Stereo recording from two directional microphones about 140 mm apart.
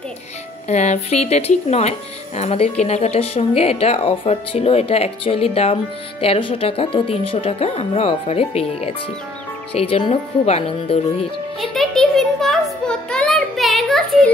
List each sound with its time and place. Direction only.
0.7 s speech: 55° left (ahead or behind)
11.6 s music: centre (ahead or behind)